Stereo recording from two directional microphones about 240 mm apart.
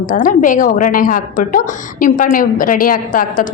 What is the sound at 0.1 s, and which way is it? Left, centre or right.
A woman's voice, left.